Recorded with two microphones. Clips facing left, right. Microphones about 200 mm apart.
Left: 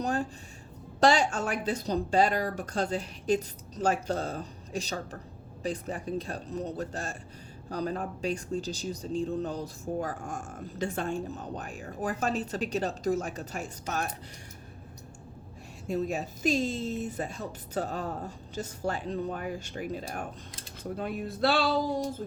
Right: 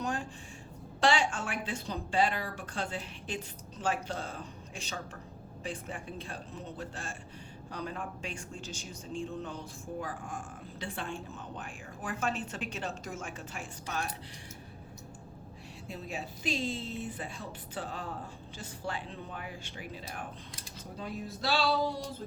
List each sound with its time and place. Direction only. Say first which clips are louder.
0.0 s a sound: left 5 dB; 40° left (ahead or behind)
0.9 s speech: left 5 dB; 40° left (ahead or behind)
15.9 s a woman's voice: left 10 dB; 45° left (ahead or behind)
20.9 s speech: left 6 dB; 60° left (ahead or behind)